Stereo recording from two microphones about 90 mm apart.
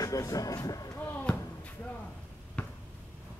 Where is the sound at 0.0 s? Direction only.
40° left (ahead or behind).